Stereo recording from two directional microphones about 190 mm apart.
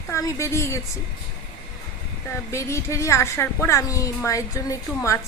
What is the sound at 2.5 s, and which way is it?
A woman's voice, 15° left (ahead or behind).